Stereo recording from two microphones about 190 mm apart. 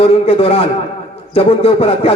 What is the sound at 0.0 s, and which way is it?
Speech, 30° left (ahead or behind).